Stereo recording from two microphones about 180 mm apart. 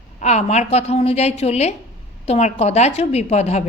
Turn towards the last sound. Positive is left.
turn(degrees=35)  # may be behind; listen again after turning